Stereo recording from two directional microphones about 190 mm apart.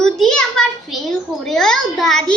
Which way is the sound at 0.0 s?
5° left (ahead or behind).